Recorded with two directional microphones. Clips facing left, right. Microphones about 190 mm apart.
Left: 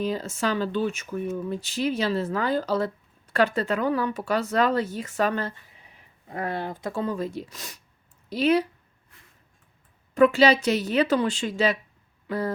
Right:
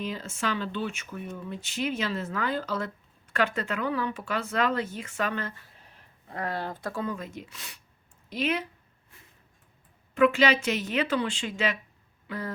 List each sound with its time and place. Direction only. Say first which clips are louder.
0.0 s speech: left 6 dB; 35° left (ahead or behind)
6.2 s speech: left 3 dB; 25° left (ahead or behind)
6.9 s speech: left 5 dB; 35° left (ahead or behind)
10.2 s speech: left 4 dB; 35° left (ahead or behind)